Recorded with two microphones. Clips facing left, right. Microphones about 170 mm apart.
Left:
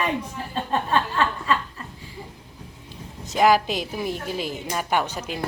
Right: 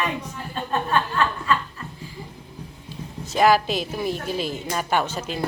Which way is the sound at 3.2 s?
15° left (ahead or behind).